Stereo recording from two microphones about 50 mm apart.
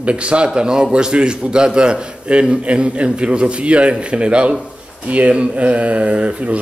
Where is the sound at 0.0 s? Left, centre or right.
Right.